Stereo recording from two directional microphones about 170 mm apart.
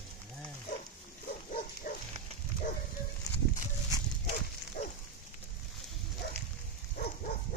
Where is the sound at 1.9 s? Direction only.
55° left (ahead or behind).